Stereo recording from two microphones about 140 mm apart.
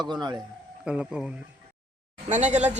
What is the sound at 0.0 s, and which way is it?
Speech, 30° right (ahead or behind).